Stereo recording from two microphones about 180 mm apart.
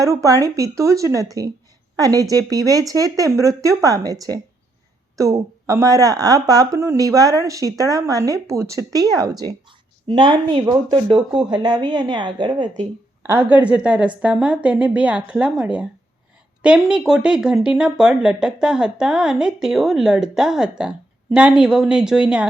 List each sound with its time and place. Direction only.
0.0 s a woman's voice: 20° right (ahead or behind)
13.2 s a woman's voice: 10° right (ahead or behind)